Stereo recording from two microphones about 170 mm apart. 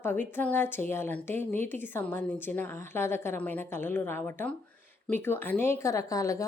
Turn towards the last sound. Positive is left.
turn(degrees=20)  # may be behind; listen again after turning